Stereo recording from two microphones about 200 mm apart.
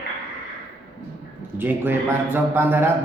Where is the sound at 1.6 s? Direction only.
10° right (ahead or behind).